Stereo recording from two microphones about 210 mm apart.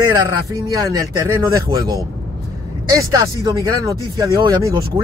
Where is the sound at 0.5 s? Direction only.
15° right (ahead or behind).